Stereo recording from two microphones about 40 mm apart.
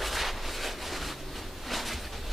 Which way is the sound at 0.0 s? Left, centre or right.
Centre.